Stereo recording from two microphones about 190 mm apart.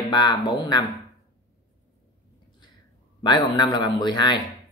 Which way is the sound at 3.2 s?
20° left (ahead or behind).